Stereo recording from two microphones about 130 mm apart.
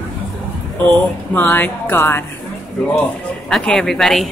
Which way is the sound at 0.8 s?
15° left (ahead or behind).